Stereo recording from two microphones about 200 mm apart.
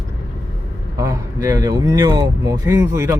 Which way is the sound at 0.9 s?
20° right (ahead or behind).